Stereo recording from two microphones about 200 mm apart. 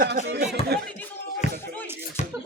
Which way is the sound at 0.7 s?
55° right (ahead or behind).